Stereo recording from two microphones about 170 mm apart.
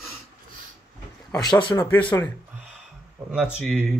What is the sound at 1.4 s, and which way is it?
Speech, 25° left (ahead or behind).